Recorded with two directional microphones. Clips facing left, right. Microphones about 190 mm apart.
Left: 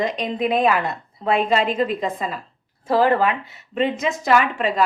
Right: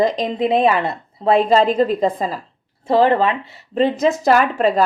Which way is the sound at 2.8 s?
25° right (ahead or behind).